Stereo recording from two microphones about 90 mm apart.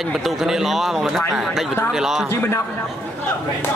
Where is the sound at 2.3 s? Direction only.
25° left (ahead or behind).